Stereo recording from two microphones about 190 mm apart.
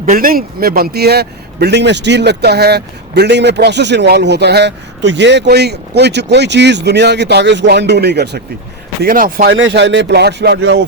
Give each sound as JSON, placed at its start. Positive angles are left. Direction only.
{"t": 0.0, "sound": "speech", "side_deg": -50}
{"t": 9.0, "sound": "speech", "side_deg": -50}
{"t": 9.6, "sound": "speech", "side_deg": -70}